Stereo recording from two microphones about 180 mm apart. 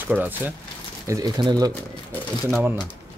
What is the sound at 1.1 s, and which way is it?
Speech, 20° right (ahead or behind).